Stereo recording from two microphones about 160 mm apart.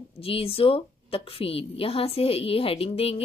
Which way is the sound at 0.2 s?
35° left (ahead or behind).